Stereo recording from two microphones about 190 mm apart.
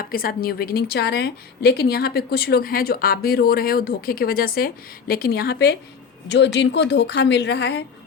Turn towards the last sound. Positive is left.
turn(degrees=65)  # may be behind; listen again after turning